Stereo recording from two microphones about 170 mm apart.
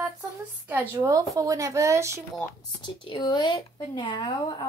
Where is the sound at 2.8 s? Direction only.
25° left (ahead or behind).